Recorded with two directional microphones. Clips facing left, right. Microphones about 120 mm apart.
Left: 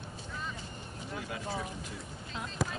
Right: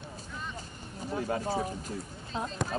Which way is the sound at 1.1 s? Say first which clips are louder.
Right 7 dB; 40° right (ahead or behind).